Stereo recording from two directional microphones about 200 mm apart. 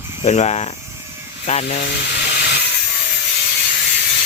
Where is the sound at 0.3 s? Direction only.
30° left (ahead or behind).